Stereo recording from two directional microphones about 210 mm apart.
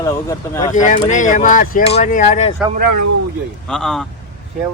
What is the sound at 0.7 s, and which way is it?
Speech, 35° left (ahead or behind).